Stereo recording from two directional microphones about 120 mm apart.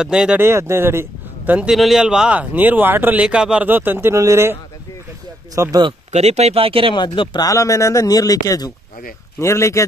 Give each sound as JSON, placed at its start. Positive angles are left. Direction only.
{"t": 0.0, "sound": "a man's voice", "side_deg": -5}
{"t": 0.4, "sound": "a man's voice", "side_deg": -20}
{"t": 6.1, "sound": "speech", "side_deg": -65}
{"t": 7.0, "sound": "speech", "side_deg": 35}